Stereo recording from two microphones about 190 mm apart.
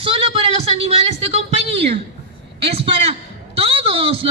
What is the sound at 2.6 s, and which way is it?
A man's voice, 30° right (ahead or behind).